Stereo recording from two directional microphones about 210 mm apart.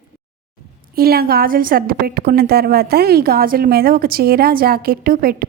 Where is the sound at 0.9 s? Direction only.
45° right (ahead or behind).